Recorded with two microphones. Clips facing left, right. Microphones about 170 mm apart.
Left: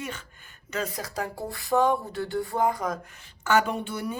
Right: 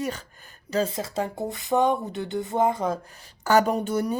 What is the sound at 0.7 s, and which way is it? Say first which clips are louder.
Speech: right 6 dB; 25° right (ahead or behind).